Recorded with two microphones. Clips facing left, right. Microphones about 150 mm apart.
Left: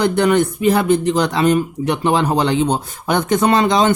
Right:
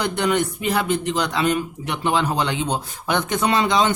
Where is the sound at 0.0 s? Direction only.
50° left (ahead or behind).